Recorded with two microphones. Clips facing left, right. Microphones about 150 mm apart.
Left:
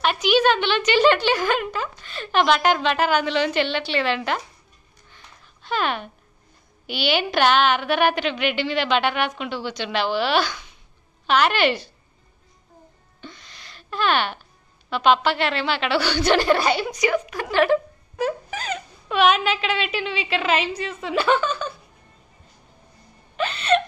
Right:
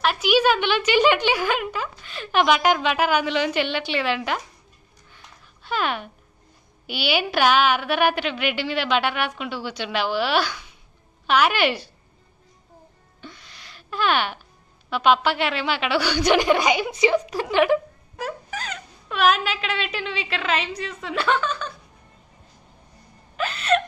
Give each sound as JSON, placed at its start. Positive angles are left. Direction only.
{"t": 0.0, "sound": "speech", "side_deg": -5}
{"t": 5.1, "sound": "a sound", "side_deg": -10}
{"t": 6.9, "sound": "speech", "side_deg": -10}
{"t": 13.2, "sound": "a sound", "side_deg": -10}
{"t": 14.9, "sound": "speech", "side_deg": -10}
{"t": 16.9, "sound": "a woman's voice", "side_deg": -25}
{"t": 18.1, "sound": "speech", "side_deg": 0}
{"t": 23.3, "sound": "gasp", "side_deg": 0}